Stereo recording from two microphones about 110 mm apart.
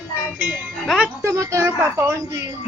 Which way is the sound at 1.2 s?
25° right (ahead or behind).